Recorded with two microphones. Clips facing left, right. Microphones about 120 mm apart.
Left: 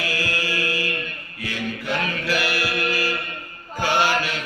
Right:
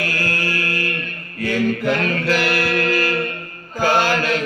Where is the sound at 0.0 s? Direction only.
50° right (ahead or behind).